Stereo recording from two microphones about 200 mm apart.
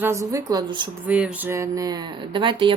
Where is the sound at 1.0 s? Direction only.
5° right (ahead or behind); by 2.7 s 25° right (ahead or behind).